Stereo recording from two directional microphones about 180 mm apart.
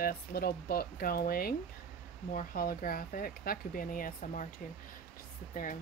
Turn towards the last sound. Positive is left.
turn(degrees=50)  # may be behind; listen again after turning